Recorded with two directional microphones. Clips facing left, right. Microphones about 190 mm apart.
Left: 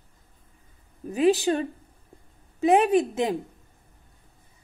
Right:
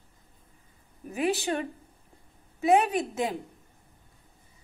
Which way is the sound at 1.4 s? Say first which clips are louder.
Left 5 dB; 30° left (ahead or behind).